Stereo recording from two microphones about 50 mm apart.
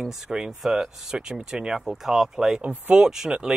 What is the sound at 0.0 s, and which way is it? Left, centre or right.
Speech, centre.